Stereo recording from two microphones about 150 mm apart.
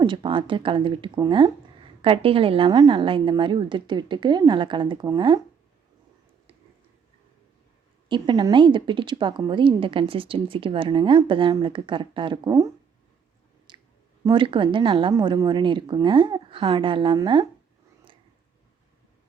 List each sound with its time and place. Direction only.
0.0 s a woman's voice: 35° right (ahead or behind)
8.1 s a woman's voice: 30° right (ahead or behind)
13.7 s clicking: 30° right (ahead or behind)
14.3 s a woman's voice: 35° right (ahead or behind)